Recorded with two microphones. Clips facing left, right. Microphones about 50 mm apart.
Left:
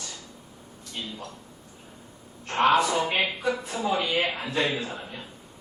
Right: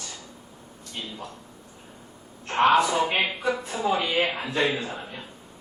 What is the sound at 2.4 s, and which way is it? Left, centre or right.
A man's voice, centre.